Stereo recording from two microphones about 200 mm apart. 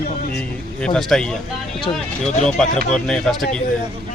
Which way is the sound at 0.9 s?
Centre (ahead or behind).